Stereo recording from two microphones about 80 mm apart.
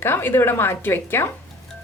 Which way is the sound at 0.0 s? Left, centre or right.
Left.